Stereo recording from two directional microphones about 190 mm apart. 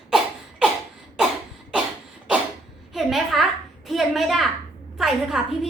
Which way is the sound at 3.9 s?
Centre (ahead or behind).